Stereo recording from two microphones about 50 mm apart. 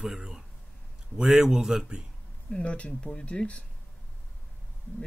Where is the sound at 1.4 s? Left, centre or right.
Centre.